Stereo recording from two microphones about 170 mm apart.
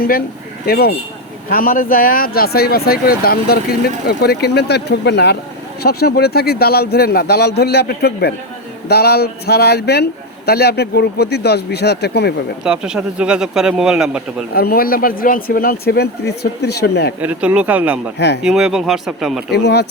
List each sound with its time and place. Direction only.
0.6 s speech: 65° left (ahead or behind); by 5.4 s 80° left
5.8 s a man's voice: 70° left (ahead or behind)
12.6 s a man's voice: 5° right (ahead or behind)
14.5 s speech: 65° left (ahead or behind)
17.2 s a man's voice: 10° right (ahead or behind)
19.6 s speech: 80° left